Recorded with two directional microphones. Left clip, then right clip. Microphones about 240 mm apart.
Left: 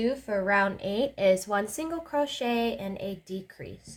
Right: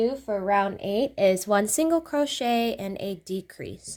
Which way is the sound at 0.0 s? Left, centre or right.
Centre.